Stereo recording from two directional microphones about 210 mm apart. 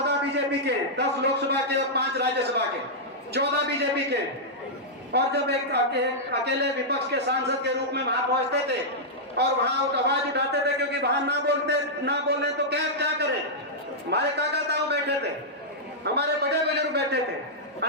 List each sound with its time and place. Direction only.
0.0 s a man's voice: 55° right (ahead or behind)
9.4 s a man's voice: 50° right (ahead or behind)